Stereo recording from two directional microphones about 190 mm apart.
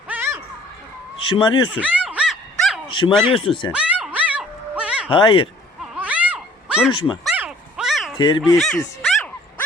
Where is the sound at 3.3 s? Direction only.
25° left (ahead or behind).